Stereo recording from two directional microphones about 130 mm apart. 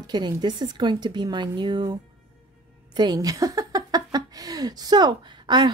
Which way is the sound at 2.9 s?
30° right (ahead or behind).